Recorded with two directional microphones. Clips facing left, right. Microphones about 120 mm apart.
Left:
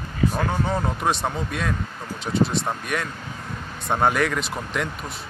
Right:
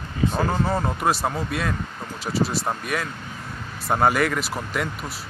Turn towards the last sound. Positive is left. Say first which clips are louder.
# even
turn(degrees=-5)  # may be behind; listen again after turning